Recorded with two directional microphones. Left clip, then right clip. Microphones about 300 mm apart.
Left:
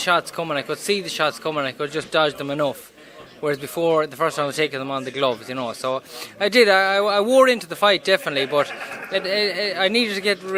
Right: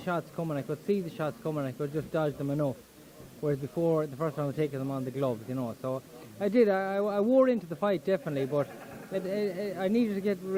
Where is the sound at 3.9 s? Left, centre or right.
Centre.